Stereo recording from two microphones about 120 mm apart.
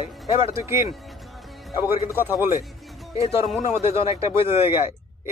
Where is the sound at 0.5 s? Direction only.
25° right (ahead or behind).